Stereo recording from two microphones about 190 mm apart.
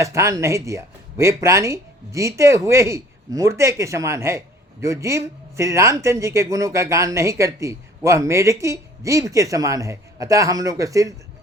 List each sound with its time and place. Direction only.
0.0 s speech: 15° right (ahead or behind)